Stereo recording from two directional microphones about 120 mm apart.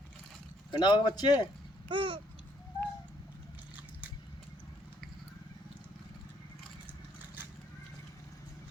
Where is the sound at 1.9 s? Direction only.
45° right (ahead or behind).